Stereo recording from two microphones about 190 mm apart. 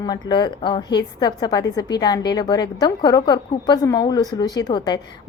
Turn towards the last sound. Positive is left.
turn(degrees=20)  # may be behind; listen again after turning